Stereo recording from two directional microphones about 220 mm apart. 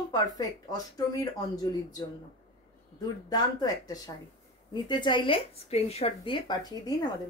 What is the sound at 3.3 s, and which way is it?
Speech, 15° left (ahead or behind).